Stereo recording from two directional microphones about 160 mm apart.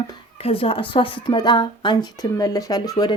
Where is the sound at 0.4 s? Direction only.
35° left (ahead or behind).